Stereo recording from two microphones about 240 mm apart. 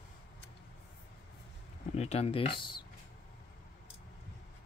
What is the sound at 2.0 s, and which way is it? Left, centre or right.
Speech, left.